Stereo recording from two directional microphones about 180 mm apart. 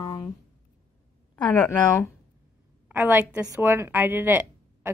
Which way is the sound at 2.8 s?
10° right (ahead or behind).